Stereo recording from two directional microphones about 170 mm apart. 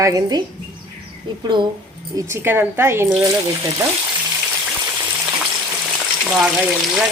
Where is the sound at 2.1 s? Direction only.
15° right (ahead or behind).